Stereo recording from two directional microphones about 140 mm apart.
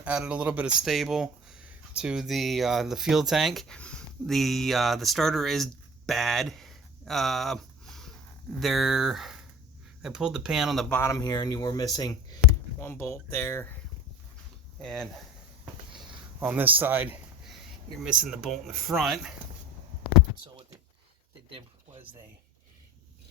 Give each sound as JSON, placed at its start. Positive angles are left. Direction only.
{"t": 0.0, "sound": "speech", "side_deg": -10}
{"t": 6.1, "sound": "a sound", "side_deg": 0}
{"t": 8.6, "sound": "speech", "side_deg": 0}
{"t": 10.8, "sound": "speech", "side_deg": 15}
{"t": 11.2, "sound": "speech", "side_deg": 25}
{"t": 12.8, "sound": "speech", "side_deg": 15}
{"t": 14.8, "sound": "speech", "side_deg": 5}
{"t": 16.4, "sound": "a man's voice", "side_deg": -10}